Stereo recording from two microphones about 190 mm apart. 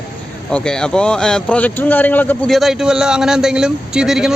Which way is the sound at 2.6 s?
Centre (ahead or behind).